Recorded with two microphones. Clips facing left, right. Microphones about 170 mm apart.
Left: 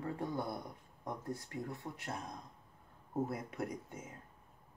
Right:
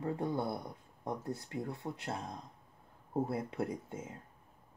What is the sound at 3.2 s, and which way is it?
Speech, 25° right (ahead or behind).